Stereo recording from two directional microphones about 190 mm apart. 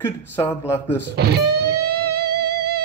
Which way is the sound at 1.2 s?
60° right (ahead or behind).